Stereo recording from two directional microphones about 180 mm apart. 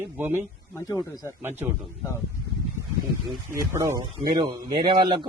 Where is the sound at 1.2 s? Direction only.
10° right (ahead or behind).